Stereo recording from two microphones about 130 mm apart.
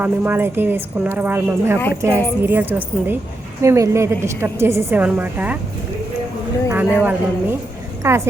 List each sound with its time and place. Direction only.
0.0 s a woman's voice: 15° right (ahead or behind)
6.7 s a woman's voice: 15° right (ahead or behind)